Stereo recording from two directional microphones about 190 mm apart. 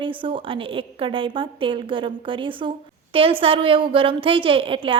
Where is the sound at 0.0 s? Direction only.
25° right (ahead or behind).